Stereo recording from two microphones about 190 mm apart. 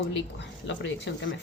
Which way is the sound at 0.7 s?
70° left (ahead or behind).